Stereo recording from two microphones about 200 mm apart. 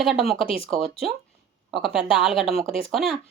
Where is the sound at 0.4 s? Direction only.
30° left (ahead or behind).